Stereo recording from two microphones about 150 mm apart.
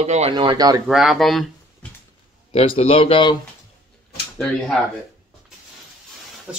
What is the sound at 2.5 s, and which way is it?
Speech, 40° left (ahead or behind).